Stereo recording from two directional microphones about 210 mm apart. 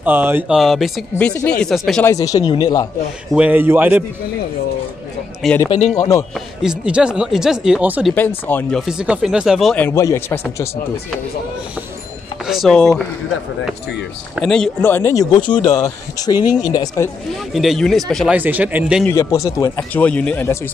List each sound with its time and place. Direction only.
0.0 s speech: 10° right (ahead or behind)
2.0 s speech: 15° left (ahead or behind)
3.3 s a man's voice: 10° right (ahead or behind)
5.4 s speech: 5° left (ahead or behind)
6.3 s speech: 5° right (ahead or behind)
8.5 s speech: 5° left (ahead or behind)
12.4 s speech: centre (ahead or behind)
14.3 s speech: centre (ahead or behind)
17.5 s speech: centre (ahead or behind)
19.0 s speech: 15° left (ahead or behind)